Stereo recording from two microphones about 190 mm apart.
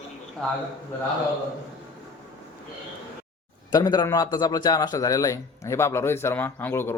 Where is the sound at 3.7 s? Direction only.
20° left (ahead or behind).